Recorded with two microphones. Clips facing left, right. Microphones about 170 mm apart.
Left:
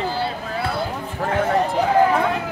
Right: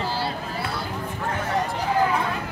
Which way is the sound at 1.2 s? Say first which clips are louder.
Left 7 dB; 60° left (ahead or behind).